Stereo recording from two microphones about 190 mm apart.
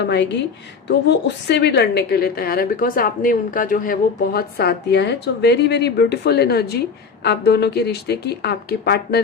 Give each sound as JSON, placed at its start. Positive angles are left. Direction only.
{"t": 0.0, "sound": "a woman's voice", "side_deg": 65}
{"t": 1.5, "sound": "a woman's voice", "side_deg": 65}